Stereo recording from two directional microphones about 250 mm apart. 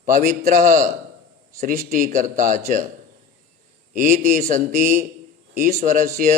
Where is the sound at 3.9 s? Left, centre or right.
Right.